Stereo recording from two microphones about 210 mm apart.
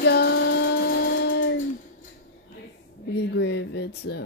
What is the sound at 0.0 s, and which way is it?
Child singing, 55° left (ahead or behind).